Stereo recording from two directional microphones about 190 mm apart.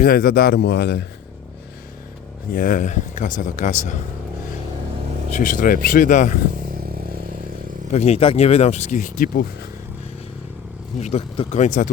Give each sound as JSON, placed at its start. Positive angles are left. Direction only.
{"t": 0.0, "sound": "speech", "side_deg": 50}
{"t": 2.5, "sound": "speech", "side_deg": 45}
{"t": 5.3, "sound": "speech", "side_deg": 45}
{"t": 7.9, "sound": "speech", "side_deg": 35}
{"t": 10.9, "sound": "speech", "side_deg": 35}